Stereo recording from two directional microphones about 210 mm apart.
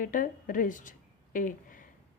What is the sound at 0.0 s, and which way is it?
A woman's voice, 40° left (ahead or behind).